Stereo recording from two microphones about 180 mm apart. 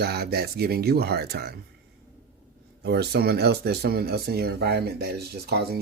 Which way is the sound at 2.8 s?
65° right (ahead or behind).